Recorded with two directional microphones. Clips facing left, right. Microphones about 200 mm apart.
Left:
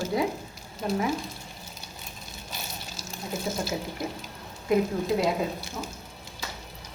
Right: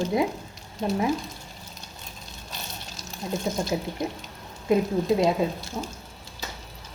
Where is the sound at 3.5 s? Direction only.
15° right (ahead or behind).